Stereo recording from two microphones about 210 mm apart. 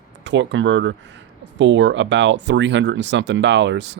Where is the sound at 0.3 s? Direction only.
60° right (ahead or behind).